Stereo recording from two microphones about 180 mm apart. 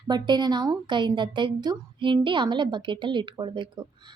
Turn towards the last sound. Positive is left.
turn(degrees=-25)  # may be behind; listen again after turning